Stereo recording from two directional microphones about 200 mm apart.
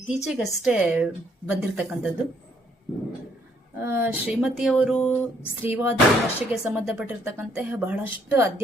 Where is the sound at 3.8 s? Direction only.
10° right (ahead or behind).